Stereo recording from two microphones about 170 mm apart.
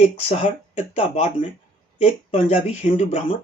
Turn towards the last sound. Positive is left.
turn(degrees=40)  # may be behind; listen again after turning